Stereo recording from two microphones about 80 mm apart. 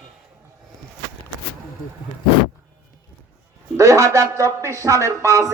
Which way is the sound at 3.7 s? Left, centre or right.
Right.